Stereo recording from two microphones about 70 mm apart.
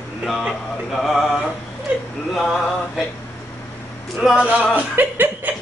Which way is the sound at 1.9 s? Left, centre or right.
Right.